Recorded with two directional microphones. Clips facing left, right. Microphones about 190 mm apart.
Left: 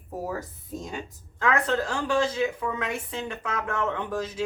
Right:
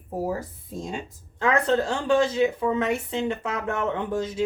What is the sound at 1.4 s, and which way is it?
A woman's voice, 25° right (ahead or behind).